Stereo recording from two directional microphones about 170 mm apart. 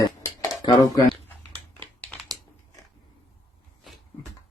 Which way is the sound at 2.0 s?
10° left (ahead or behind).